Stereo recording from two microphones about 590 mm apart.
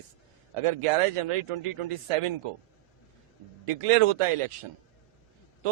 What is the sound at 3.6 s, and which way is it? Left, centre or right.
Speech, right.